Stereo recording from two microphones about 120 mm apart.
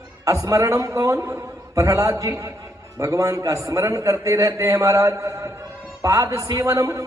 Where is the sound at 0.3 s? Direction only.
25° right (ahead or behind).